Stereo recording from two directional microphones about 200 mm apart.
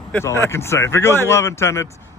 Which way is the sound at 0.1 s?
10° left (ahead or behind).